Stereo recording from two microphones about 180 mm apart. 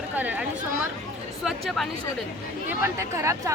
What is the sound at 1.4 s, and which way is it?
Speech, centre (ahead or behind).